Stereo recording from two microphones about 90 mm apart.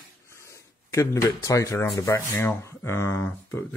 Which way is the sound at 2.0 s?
35° left (ahead or behind).